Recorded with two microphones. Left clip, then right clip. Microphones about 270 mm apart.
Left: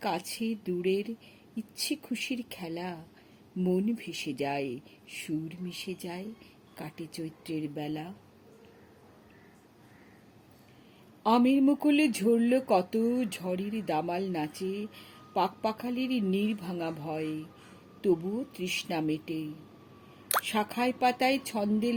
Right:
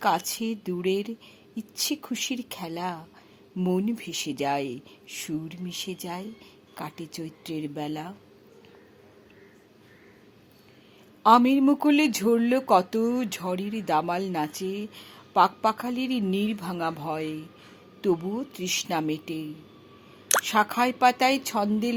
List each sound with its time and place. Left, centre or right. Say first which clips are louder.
0.0 s speech: right 8 dB; centre
11.2 s speech: right 7 dB; centre